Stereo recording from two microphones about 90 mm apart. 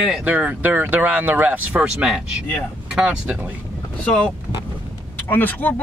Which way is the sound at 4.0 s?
10° left (ahead or behind).